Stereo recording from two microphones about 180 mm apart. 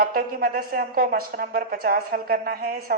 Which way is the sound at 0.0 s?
55° right (ahead or behind).